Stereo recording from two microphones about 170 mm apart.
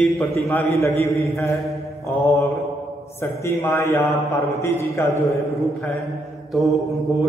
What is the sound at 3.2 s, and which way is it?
A man's voice, 15° left (ahead or behind).